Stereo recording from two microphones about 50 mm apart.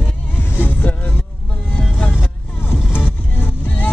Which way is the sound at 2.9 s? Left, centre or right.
Left.